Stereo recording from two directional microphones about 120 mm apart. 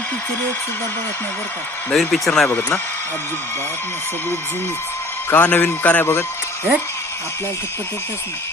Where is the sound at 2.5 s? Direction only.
20° left (ahead or behind).